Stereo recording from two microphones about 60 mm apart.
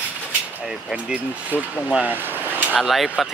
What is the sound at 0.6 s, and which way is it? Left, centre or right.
Speech, centre.